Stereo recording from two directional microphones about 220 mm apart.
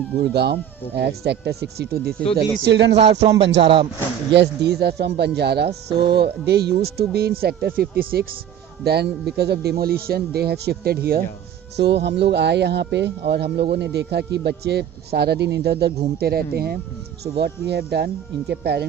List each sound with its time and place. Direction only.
0.2 s speech: 50° right (ahead or behind)
2.9 s speech: 30° right (ahead or behind)
4.4 s speech: 50° right (ahead or behind)
5.9 s speech: 20° right (ahead or behind)
6.1 s speech: 50° right (ahead or behind)